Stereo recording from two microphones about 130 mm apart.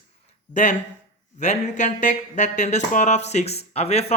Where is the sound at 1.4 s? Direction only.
65° left (ahead or behind).